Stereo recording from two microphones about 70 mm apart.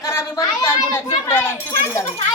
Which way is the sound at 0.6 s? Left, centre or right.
Left.